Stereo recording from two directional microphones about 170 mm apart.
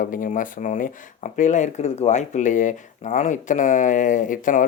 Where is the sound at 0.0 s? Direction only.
50° left (ahead or behind).